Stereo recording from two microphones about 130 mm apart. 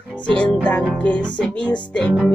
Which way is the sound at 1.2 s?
10° left (ahead or behind).